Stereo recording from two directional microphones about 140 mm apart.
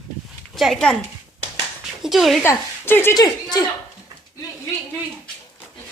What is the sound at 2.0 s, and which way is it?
Speech, centre (ahead or behind).